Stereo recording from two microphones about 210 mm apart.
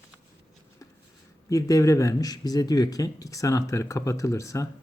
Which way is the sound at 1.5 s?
15° left (ahead or behind).